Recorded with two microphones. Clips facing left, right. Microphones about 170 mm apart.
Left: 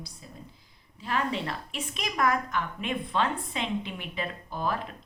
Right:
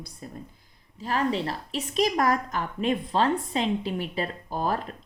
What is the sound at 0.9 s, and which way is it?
A woman's voice, 40° right (ahead or behind).